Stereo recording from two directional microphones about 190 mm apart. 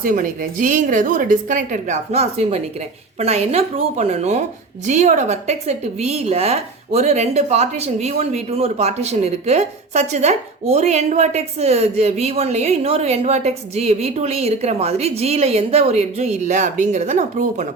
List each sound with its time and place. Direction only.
0.0 s a woman's voice: 45° right (ahead or behind)